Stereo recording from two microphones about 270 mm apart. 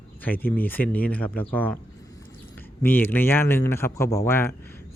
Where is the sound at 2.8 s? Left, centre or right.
Centre.